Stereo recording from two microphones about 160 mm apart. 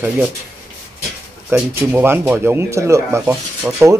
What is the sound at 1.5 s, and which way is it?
Speech, 15° right (ahead or behind).